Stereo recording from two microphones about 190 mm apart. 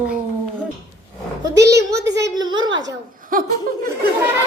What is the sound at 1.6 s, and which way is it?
Speech, 60° right (ahead or behind).